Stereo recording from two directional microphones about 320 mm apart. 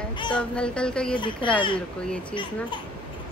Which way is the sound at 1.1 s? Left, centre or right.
Centre.